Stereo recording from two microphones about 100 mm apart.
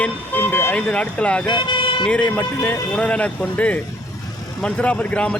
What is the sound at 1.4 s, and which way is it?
Vehicle, 50° left (ahead or behind).